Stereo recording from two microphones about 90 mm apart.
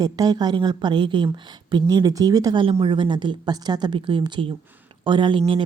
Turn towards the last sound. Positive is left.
turn(degrees=-70)  # may be behind; listen again after turning